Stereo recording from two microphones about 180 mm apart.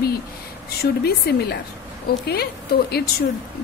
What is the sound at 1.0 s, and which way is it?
A woman's voice, 60° left (ahead or behind).